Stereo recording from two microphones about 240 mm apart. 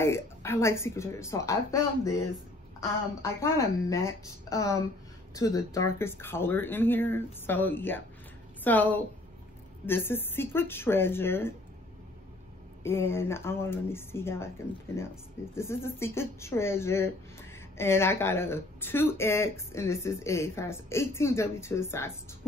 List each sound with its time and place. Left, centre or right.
0.0 s speech: centre
12.8 s speech: centre